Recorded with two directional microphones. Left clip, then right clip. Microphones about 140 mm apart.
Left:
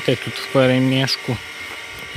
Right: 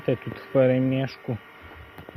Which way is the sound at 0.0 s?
30° left (ahead or behind).